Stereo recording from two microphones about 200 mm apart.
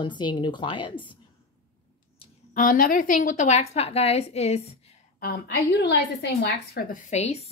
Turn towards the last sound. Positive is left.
turn(degrees=35)  # may be behind; listen again after turning